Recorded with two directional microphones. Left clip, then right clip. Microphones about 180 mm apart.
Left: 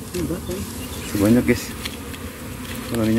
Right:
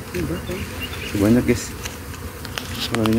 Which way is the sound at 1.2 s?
5° left (ahead or behind).